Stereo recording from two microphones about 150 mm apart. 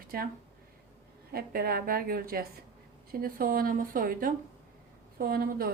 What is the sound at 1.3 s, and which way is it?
A woman's voice, 85° right.